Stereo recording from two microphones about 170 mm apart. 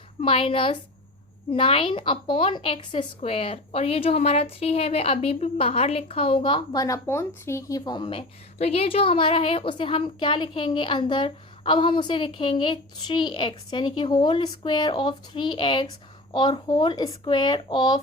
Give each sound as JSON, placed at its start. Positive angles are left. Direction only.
{"t": 0.2, "sound": "a woman's voice", "side_deg": 35}